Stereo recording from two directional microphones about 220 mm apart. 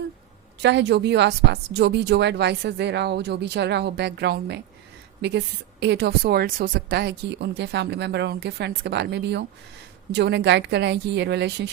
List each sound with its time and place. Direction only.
0.6 s speech: 50° right (ahead or behind)